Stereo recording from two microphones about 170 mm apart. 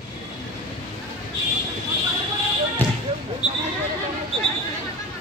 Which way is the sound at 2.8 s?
10° left (ahead or behind).